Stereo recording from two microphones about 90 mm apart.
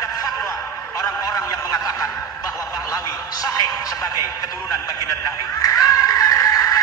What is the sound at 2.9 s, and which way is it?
Music, 40° left (ahead or behind).